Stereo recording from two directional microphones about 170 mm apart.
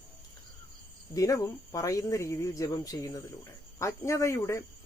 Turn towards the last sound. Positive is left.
turn(degrees=15)  # may be behind; listen again after turning